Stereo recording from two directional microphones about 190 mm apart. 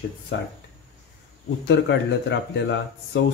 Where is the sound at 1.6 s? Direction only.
65° left (ahead or behind).